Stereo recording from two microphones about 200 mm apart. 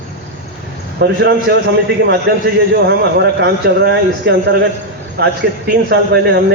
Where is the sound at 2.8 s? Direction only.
55° right (ahead or behind).